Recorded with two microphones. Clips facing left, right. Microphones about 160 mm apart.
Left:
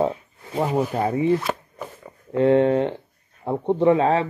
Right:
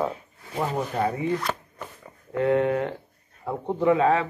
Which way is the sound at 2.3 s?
25° left (ahead or behind).